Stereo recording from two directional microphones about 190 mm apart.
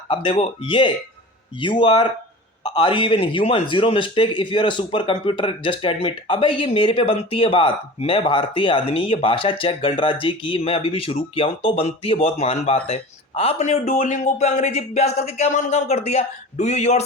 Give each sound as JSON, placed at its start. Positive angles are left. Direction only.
{"t": 0.1, "sound": "a man's voice", "side_deg": 25}